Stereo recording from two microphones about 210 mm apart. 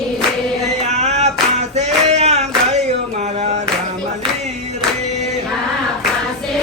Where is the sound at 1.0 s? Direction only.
30° right (ahead or behind).